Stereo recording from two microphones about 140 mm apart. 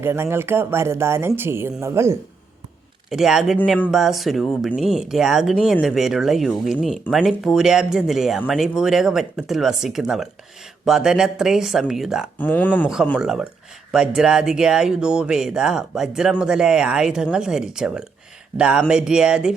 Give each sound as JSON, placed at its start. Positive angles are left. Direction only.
{"t": 0.0, "sound": "speech", "side_deg": -15}
{"t": 3.1, "sound": "speech", "side_deg": -5}
{"t": 12.4, "sound": "speech", "side_deg": 10}
{"t": 13.1, "sound": "speech", "side_deg": -5}